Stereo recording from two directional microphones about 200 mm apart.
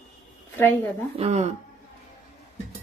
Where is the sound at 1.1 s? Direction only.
35° right (ahead or behind).